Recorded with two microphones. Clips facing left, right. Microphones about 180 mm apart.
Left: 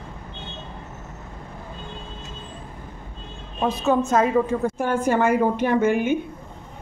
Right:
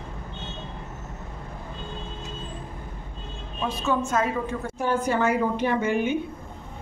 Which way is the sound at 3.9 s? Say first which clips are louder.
Left 6 dB; 40° left (ahead or behind).